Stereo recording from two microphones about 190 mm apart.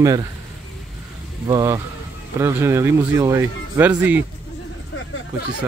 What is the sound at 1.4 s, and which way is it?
Speech, 15° right (ahead or behind).